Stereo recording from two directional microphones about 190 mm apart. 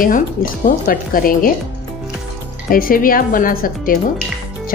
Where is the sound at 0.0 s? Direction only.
45° left (ahead or behind).